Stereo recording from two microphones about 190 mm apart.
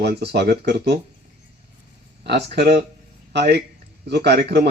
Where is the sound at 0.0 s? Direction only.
60° right (ahead or behind).